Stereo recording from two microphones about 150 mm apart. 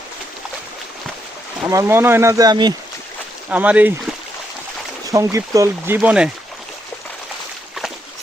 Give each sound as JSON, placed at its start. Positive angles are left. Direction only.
{"t": 1.6, "sound": "speech", "side_deg": -20}
{"t": 3.5, "sound": "speech", "side_deg": -10}
{"t": 5.0, "sound": "speech", "side_deg": -20}